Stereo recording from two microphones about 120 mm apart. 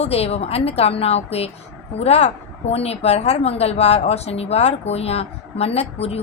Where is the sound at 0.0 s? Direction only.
60° left (ahead or behind).